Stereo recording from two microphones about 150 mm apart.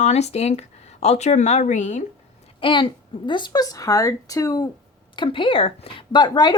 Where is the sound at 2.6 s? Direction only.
35° left (ahead or behind).